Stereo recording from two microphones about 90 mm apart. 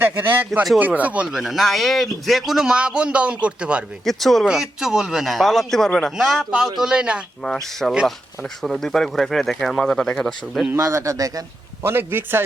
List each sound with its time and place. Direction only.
0.0 s a man's voice: 25° right (ahead or behind)
1.4 s speech: centre (ahead or behind)
4.0 s speech: centre (ahead or behind)
7.4 s speech: 5° left (ahead or behind)
10.8 s speech: 35° right (ahead or behind)
11.8 s a man's voice: 25° right (ahead or behind)